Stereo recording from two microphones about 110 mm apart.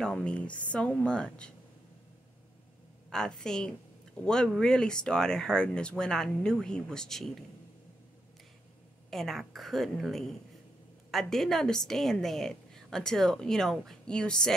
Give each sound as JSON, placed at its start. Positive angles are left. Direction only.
{"t": 0.0, "sound": "speech", "side_deg": 10}
{"t": 3.1, "sound": "a woman's voice", "side_deg": 5}
{"t": 9.1, "sound": "a woman's voice", "side_deg": 0}